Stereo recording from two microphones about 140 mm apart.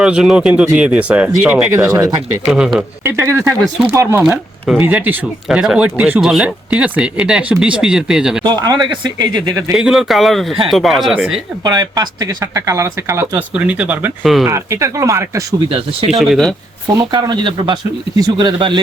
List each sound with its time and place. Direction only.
0.0 s speech: 5° right (ahead or behind)
1.7 s speech: 20° right (ahead or behind)
8.4 s speech: 30° right (ahead or behind)
9.7 s speech: 5° right (ahead or behind)
11.6 s speech: 30° right (ahead or behind)
13.5 s speech: 10° right (ahead or behind)
15.7 s speech: 40° right (ahead or behind)
16.1 s speech: centre (ahead or behind)
16.8 s speech: 25° right (ahead or behind)